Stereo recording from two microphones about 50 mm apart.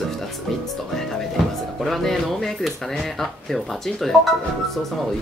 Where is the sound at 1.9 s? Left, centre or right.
Centre.